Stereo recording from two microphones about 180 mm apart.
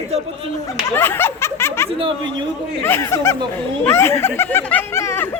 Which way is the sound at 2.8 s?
15° left (ahead or behind).